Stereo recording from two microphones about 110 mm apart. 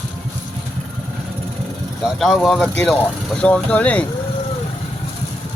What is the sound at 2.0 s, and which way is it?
Speech, 5° left (ahead or behind).